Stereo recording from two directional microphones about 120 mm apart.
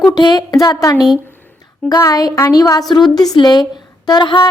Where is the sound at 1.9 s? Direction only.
30° left (ahead or behind).